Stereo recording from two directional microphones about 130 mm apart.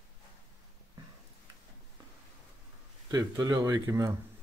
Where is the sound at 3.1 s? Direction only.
30° right (ahead or behind).